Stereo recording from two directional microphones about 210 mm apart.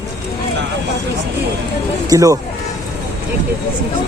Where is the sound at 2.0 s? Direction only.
15° right (ahead or behind).